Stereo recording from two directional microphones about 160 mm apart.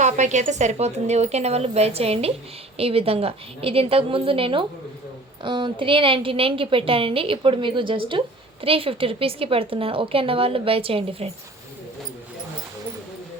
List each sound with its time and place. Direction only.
0.0 s a woman's voice: 45° right (ahead or behind)